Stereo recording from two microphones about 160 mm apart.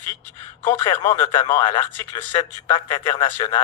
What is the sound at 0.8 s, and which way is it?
Speech, 15° left (ahead or behind).